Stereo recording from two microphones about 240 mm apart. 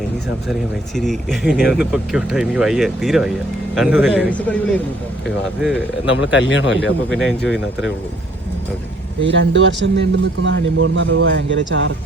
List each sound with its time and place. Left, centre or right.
0.9 s speech: centre
6.1 s a man's voice: left
7.1 s speech: centre
9.3 s speech: right